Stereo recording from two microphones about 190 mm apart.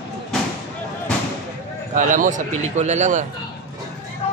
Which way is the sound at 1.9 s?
45° right (ahead or behind).